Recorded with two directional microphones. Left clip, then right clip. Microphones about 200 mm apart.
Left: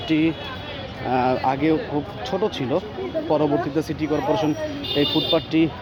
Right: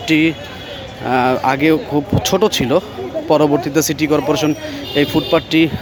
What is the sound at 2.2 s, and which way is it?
Speech, 25° right (ahead or behind).